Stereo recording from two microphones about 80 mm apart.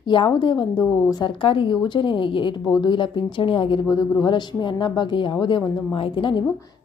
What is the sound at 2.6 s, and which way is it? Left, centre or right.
A woman's voice, left.